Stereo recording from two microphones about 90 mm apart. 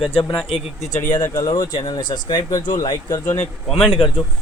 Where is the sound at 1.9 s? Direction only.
55° left (ahead or behind).